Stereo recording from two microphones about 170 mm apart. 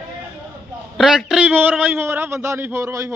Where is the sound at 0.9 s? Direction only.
5° right (ahead or behind).